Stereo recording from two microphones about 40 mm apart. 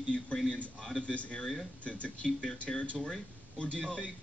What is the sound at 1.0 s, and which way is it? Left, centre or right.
A man's voice, left.